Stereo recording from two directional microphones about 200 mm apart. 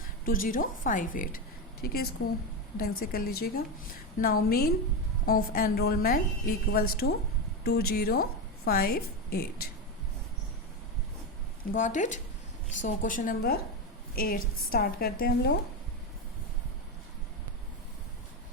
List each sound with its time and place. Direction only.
0.3 s a woman's voice: 45° left (ahead or behind)
11.7 s a woman's voice: 40° left (ahead or behind)